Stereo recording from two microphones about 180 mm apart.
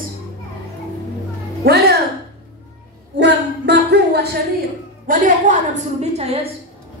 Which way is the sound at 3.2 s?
70° right (ahead or behind).